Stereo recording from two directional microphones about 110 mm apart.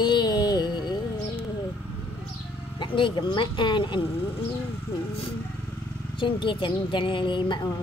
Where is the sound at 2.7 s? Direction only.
45° left (ahead or behind).